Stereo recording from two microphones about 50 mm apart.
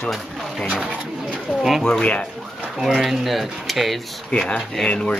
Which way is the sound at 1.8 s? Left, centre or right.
Centre.